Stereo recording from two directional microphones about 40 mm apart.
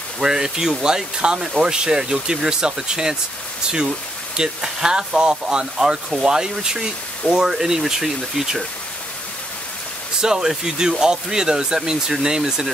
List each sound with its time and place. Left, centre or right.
0.2 s speech: centre
4.4 s speech: centre
10.2 s speech: centre